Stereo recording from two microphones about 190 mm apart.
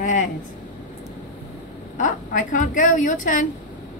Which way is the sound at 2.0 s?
45° left (ahead or behind).